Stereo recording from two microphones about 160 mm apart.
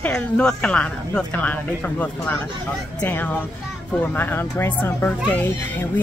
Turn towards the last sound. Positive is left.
turn(degrees=10)  # may be behind; listen again after turning